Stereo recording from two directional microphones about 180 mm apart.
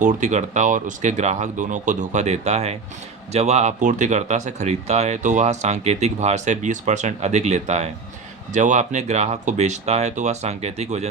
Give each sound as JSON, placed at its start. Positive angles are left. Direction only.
{"t": 0.0, "sound": "speech", "side_deg": -40}